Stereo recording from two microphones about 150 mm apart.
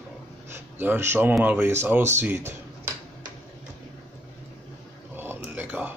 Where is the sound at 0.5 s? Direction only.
15° right (ahead or behind).